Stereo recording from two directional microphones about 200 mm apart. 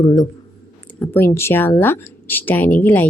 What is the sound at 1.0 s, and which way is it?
A woman's voice, 10° left (ahead or behind).